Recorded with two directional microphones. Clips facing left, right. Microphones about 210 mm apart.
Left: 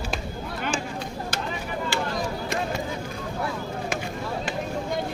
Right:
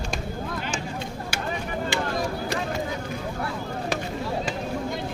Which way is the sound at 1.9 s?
20° right (ahead or behind).